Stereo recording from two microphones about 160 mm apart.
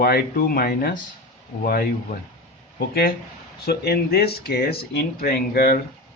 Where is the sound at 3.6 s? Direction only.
90° left; by 5.8 s 70° left (ahead or behind).